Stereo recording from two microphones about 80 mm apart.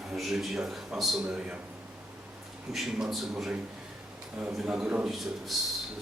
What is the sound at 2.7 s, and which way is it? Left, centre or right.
Speech, centre.